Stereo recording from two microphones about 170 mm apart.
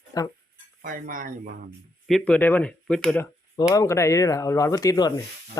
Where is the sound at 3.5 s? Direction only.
20° left (ahead or behind).